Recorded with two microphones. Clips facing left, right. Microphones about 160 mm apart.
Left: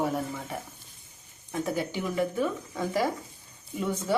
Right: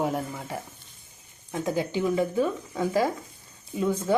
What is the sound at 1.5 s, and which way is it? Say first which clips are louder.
Speech: right 2 dB; 15° right (ahead or behind).